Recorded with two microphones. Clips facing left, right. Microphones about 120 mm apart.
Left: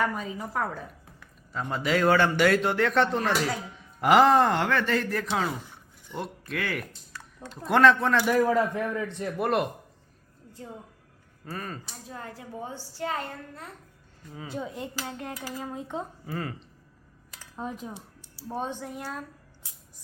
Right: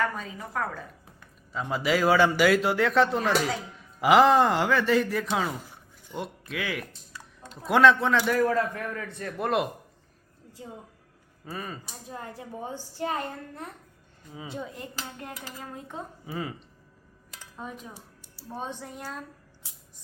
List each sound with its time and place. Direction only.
0.0 s a man's voice: 10° left (ahead or behind)
8.2 s a man's voice: 15° left (ahead or behind)
9.4 s a man's voice: centre (ahead or behind)
11.4 s a man's voice: 5° right (ahead or behind)
12.0 s a woman's voice: 20° right (ahead or behind)
16.2 s a woman's voice: 10° right (ahead or behind)
17.8 s speech: 15° left (ahead or behind)